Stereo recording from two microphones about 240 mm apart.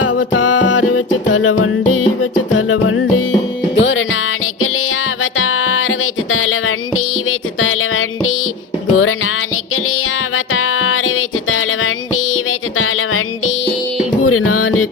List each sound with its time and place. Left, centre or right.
0.1 s music: left
5.2 s music: left